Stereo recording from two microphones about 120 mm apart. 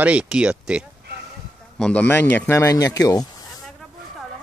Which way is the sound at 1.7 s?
10° left (ahead or behind).